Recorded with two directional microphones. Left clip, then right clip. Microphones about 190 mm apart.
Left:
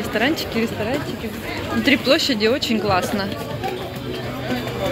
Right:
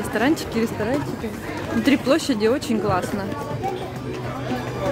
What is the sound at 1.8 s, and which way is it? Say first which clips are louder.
Speech: left 3 dB; 20° right (ahead or behind).